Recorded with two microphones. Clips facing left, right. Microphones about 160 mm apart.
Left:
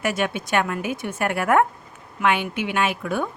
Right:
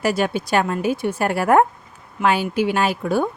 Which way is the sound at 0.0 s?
35° right (ahead or behind).